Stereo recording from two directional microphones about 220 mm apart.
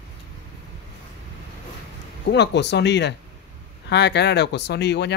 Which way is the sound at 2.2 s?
50° left (ahead or behind).